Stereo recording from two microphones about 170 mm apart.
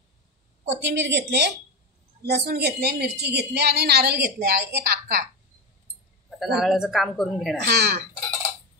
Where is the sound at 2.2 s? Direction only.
70° right (ahead or behind).